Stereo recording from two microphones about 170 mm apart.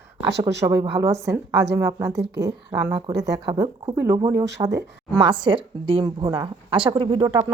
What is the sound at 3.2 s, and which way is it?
Speech, 20° right (ahead or behind).